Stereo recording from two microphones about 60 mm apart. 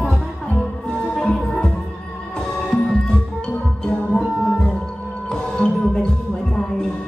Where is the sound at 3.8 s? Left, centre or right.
Centre.